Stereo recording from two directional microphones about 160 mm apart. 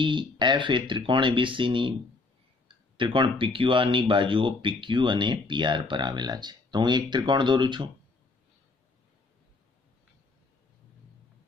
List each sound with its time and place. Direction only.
0.0 s speech: 30° right (ahead or behind)
3.0 s speech: 30° right (ahead or behind)